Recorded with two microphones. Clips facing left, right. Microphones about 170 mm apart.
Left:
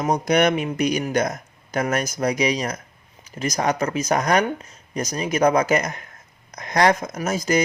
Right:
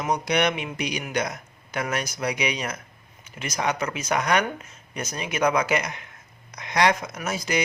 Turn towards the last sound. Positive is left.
turn(degrees=45)  # may be behind; listen again after turning